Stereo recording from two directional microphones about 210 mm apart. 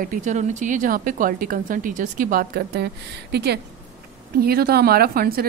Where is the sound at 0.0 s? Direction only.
40° right (ahead or behind).